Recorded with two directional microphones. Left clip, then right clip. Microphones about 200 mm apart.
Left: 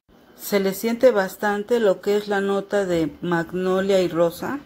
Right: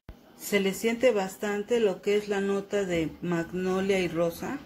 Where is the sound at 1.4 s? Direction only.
20° left (ahead or behind).